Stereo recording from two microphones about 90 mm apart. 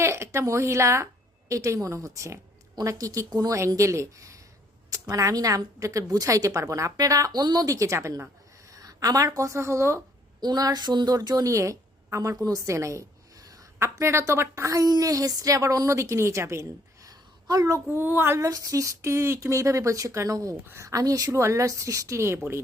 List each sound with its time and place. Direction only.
0.0 s a woman's voice: 30° right (ahead or behind)
8.7 s speech: 40° right (ahead or behind)
10.4 s a woman's voice: 45° right (ahead or behind)
13.7 s a woman's voice: 30° right (ahead or behind)
17.8 s child singing: 20° right (ahead or behind)
18.3 s a woman's voice: 40° right (ahead or behind)